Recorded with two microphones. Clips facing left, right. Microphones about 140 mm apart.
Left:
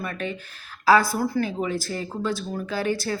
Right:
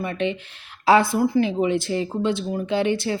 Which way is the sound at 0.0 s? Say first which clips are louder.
Right 6 dB; 25° right (ahead or behind).